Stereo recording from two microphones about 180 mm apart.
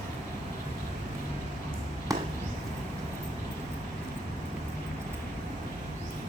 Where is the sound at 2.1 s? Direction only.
20° right (ahead or behind).